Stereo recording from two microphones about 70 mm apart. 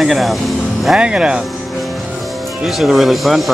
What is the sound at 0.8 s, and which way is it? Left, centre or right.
Speech, centre.